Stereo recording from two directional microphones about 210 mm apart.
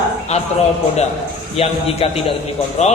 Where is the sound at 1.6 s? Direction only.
30° left (ahead or behind).